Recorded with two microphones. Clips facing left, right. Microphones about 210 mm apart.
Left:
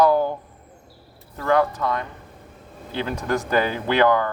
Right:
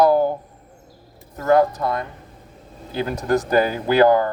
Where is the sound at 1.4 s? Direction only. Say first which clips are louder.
Right 4 dB; 40° right (ahead or behind).